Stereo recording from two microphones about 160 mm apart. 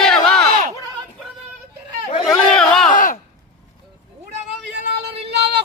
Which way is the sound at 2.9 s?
55° left (ahead or behind).